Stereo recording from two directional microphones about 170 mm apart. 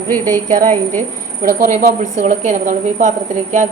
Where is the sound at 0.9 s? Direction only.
55° right (ahead or behind).